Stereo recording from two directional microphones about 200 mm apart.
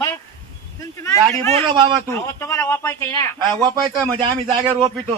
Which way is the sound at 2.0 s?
15° left (ahead or behind).